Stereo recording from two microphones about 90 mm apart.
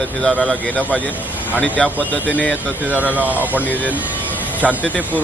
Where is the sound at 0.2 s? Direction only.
15° left (ahead or behind).